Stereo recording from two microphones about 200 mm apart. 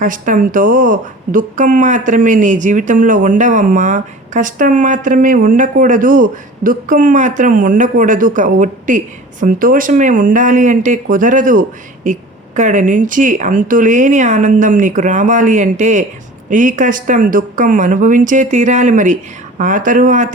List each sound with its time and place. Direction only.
0.0 s speech: 40° right (ahead or behind)